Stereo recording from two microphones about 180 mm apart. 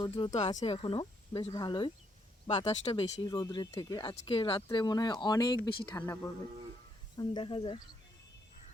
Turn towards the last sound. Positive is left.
turn(degrees=30)  # may be behind; listen again after turning